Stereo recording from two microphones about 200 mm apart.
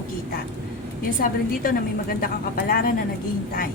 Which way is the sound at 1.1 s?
45° left (ahead or behind).